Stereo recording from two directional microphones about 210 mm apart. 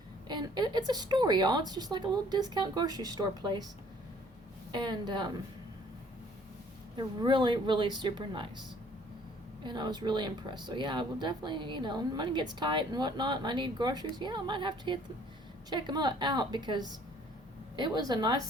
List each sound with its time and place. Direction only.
0.3 s speech: 20° right (ahead or behind)
4.7 s speech: 20° right (ahead or behind)
6.9 s speech: 20° right (ahead or behind)
9.6 s speech: 20° right (ahead or behind)